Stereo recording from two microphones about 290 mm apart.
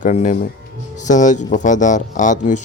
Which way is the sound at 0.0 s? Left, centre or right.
Left.